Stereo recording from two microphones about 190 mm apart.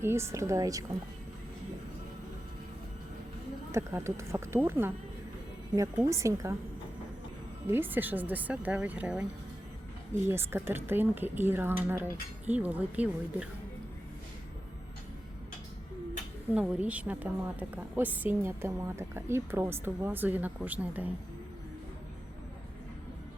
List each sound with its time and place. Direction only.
0.0 s a woman's voice: 15° right (ahead or behind)
3.7 s a woman's voice: 15° right (ahead or behind)
7.7 s a woman's voice: 10° right (ahead or behind)
10.2 s a woman's voice: 10° right (ahead or behind)
16.6 s a woman's voice: 5° right (ahead or behind)